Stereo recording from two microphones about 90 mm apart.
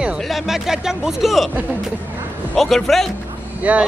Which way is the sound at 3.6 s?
15° right (ahead or behind).